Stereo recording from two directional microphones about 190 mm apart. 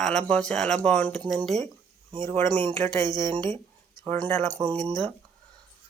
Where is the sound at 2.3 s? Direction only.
10° left (ahead or behind).